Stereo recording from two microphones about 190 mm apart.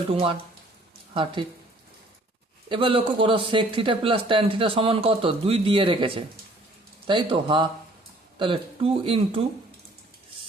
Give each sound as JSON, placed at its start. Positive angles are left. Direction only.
{"t": 0.1, "sound": "speech", "side_deg": -30}
{"t": 2.6, "sound": "speech", "side_deg": -25}